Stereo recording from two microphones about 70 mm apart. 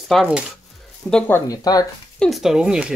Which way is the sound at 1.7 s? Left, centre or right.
Left.